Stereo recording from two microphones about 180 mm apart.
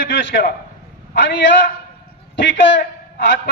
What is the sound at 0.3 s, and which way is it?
Speech, 60° left (ahead or behind).